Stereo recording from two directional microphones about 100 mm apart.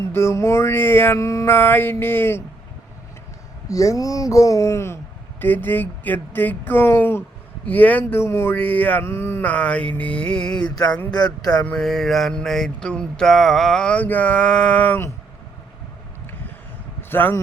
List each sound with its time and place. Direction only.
0.0 s a sound: 25° left (ahead or behind)
3.7 s speech: 35° left (ahead or behind)
5.4 s a sound: 20° left (ahead or behind)
7.7 s mantra: 15° left (ahead or behind)
9.5 s mantra: 10° left (ahead or behind)
11.1 s speech: 45° left (ahead or behind)
11.5 s mantra: 15° left (ahead or behind)
11.8 s mantra: 5° left (ahead or behind)
17.0 s vehicle: 20° left (ahead or behind)